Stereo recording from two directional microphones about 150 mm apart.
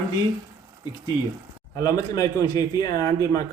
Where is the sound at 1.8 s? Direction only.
25° left (ahead or behind).